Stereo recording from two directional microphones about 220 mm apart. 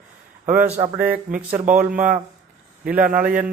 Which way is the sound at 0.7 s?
30° right (ahead or behind).